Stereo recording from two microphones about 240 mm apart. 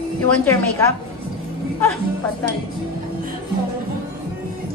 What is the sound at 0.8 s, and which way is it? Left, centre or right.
Speech, centre.